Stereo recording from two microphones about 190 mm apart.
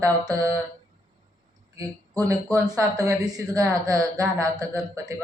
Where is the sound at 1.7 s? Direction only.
15° right (ahead or behind).